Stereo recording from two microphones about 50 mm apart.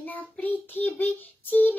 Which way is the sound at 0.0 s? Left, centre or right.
Left.